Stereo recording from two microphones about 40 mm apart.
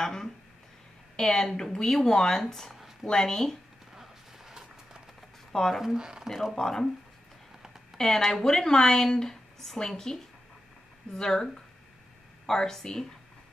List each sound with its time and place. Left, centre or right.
0.0 s a sound: centre
1.1 s speech: centre
2.7 s a sound: centre
3.1 s speech: centre
3.9 s a sound: centre
5.5 s speech: centre
5.9 s speech: centre
6.2 s speech: centre
6.5 s speech: centre
8.3 s speech: centre
11.1 s speech: centre
12.4 s speech: centre